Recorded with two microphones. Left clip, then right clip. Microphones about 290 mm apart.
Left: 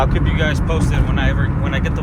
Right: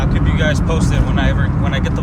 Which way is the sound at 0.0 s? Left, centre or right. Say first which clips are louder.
Even; centre.